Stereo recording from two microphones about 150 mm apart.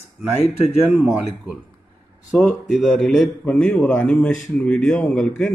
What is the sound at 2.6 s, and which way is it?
Speech, centre (ahead or behind).